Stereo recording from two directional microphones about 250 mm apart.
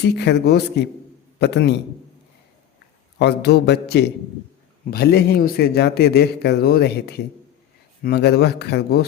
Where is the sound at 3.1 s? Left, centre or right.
Left.